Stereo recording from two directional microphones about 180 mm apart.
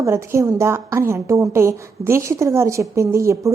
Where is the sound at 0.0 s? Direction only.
15° right (ahead or behind).